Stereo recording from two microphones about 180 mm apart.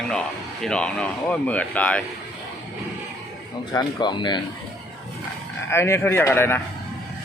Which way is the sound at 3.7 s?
25° left (ahead or behind).